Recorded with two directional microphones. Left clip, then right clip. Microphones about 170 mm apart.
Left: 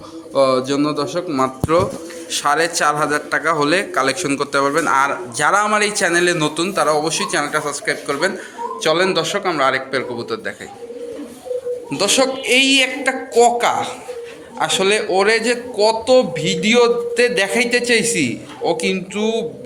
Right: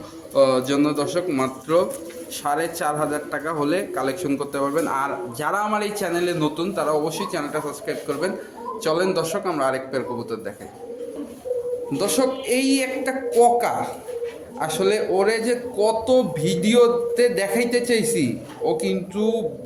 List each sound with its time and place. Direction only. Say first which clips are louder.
0.3 s a man's voice: left 2 dB; 20° left (ahead or behind)
11.9 s a man's voice: left 6 dB; centre (ahead or behind)